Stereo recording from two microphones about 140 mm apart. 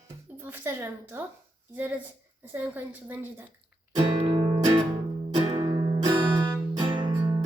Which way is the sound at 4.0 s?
45° right (ahead or behind).